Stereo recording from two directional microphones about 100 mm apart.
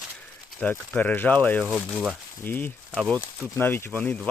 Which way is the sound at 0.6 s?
15° left (ahead or behind).